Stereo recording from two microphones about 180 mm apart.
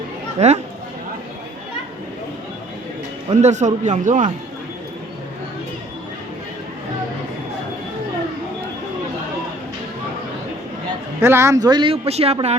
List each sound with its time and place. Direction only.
0.3 s a man's voice: 35° right (ahead or behind)
3.4 s a man's voice: 40° right (ahead or behind)
11.2 s speech: 15° right (ahead or behind); by 12.5 s 35° right (ahead or behind)